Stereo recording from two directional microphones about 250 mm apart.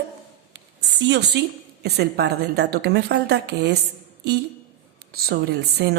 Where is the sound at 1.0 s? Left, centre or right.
Right.